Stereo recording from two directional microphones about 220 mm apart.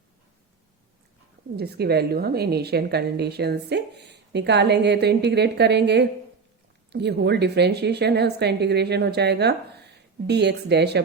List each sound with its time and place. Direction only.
1.5 s speech: 45° right (ahead or behind)